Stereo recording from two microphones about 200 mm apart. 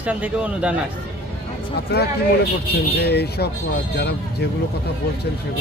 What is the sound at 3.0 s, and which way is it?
Speech, 55° left (ahead or behind).